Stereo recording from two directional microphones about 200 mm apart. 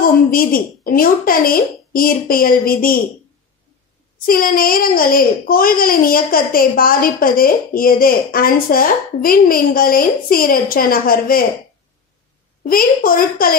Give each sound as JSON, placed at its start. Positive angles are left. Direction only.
{"t": 0.0, "sound": "a child's voice", "side_deg": 45}
{"t": 4.3, "sound": "a child's voice", "side_deg": 45}
{"t": 12.6, "sound": "a child's voice", "side_deg": 45}